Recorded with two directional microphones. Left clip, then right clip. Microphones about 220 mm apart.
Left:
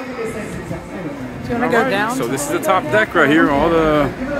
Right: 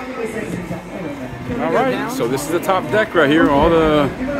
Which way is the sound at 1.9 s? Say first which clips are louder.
Left 4 dB; 45° left (ahead or behind).